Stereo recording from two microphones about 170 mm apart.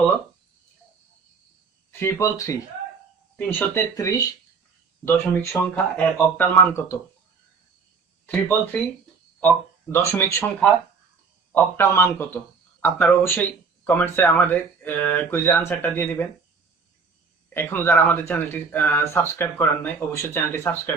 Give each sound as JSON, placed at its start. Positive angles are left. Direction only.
{"t": 1.9, "sound": "speech", "side_deg": 15}
{"t": 5.0, "sound": "speech", "side_deg": 10}
{"t": 8.3, "sound": "speech", "side_deg": 10}
{"t": 17.5, "sound": "speech", "side_deg": 15}